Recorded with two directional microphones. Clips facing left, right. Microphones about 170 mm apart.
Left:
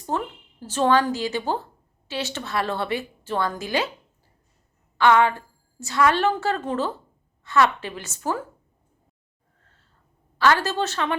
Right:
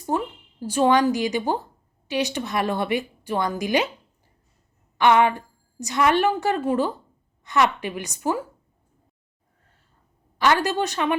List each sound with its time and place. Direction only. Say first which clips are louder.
0.1 s a woman's voice: right 2 dB; 10° right (ahead or behind)
4.9 s a woman's voice: even; 20° right (ahead or behind)
10.3 s a woman's voice: even; 15° right (ahead or behind)